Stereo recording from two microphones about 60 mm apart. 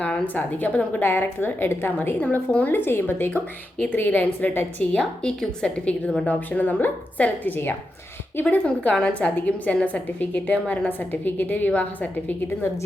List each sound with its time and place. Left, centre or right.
0.3 s a woman's voice: left
2.2 s a woman's voice: left
4.9 s a woman's voice: centre